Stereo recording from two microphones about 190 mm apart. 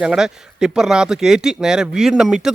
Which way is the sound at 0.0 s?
5° right (ahead or behind).